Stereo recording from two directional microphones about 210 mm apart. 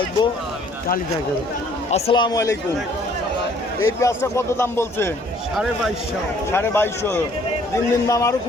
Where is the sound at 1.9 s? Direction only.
20° left (ahead or behind).